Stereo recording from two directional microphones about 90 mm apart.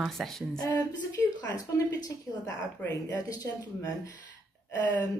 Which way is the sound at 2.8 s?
20° left (ahead or behind).